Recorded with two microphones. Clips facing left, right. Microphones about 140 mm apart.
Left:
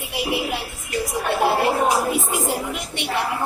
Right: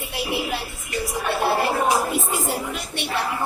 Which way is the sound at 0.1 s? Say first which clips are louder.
Left 2 dB; 15° left (ahead or behind).